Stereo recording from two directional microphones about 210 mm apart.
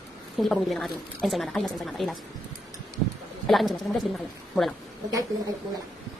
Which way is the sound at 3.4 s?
Centre (ahead or behind).